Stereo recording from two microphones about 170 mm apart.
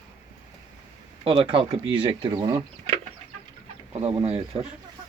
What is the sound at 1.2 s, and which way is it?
Speech, 30° right (ahead or behind).